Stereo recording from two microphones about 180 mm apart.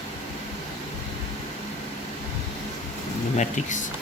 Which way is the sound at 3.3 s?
40° left (ahead or behind).